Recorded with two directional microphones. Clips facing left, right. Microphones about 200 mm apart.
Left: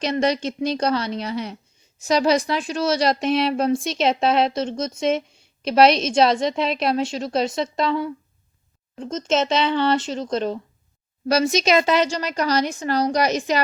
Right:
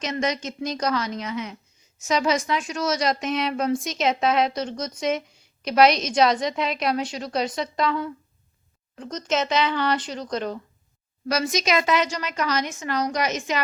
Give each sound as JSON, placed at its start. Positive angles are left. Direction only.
{"t": 0.0, "sound": "a woman's voice", "side_deg": 35}